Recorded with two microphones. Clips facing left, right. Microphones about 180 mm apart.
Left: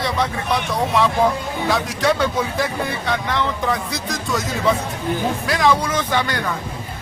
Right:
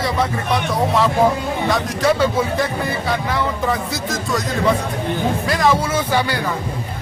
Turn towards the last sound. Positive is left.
turn(degrees=-10)  # may be behind; listen again after turning